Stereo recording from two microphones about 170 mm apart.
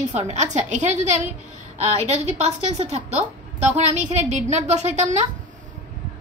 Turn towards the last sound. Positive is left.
turn(degrees=-40)  # may be behind; listen again after turning